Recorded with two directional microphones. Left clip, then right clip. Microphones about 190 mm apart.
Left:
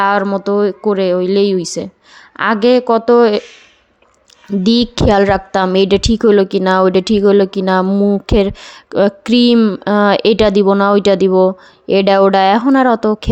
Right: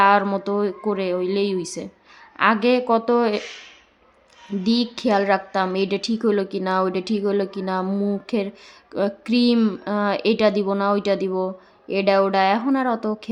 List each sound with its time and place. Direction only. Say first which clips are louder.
0.0 s a woman's voice: left 3 dB; 30° left (ahead or behind)
4.6 s a woman's voice: left 10 dB; 40° left (ahead or behind)